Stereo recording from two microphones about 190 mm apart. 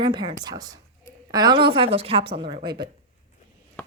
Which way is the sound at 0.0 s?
25° right (ahead or behind).